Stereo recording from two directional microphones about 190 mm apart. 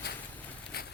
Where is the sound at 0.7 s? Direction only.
55° left (ahead or behind).